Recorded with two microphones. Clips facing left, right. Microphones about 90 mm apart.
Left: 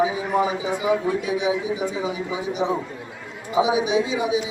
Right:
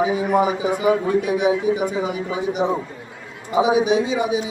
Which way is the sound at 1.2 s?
55° right (ahead or behind).